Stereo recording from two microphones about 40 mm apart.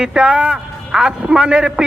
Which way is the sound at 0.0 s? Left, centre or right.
Right.